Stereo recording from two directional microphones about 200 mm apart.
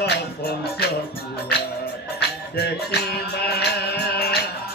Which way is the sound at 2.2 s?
55° left (ahead or behind).